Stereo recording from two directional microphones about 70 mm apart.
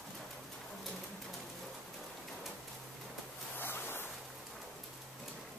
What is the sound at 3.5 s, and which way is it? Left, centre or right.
Ocean, left.